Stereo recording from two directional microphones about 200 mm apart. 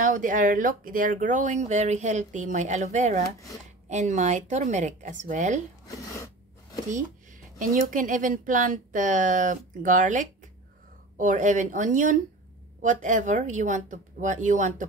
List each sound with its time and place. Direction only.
0.0 s speech: 40° right (ahead or behind)
7.0 s speech: 40° right (ahead or behind)